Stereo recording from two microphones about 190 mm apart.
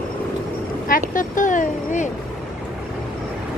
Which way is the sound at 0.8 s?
45° left (ahead or behind).